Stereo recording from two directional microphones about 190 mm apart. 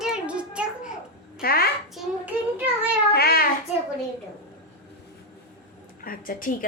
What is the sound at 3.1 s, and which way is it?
Speech, 55° left (ahead or behind).